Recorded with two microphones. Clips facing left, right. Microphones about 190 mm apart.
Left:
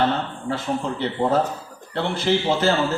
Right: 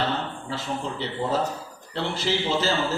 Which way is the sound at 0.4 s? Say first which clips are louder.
Left 5 dB; 55° left (ahead or behind).